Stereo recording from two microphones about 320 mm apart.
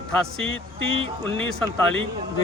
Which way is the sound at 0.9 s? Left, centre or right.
Centre.